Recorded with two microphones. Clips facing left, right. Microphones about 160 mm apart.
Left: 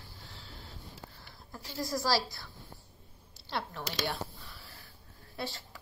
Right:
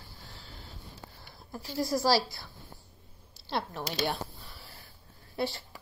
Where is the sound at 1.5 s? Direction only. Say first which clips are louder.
Right 5 dB; 25° right (ahead or behind).